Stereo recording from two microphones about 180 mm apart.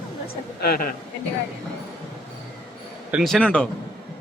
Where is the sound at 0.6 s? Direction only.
60° left (ahead or behind).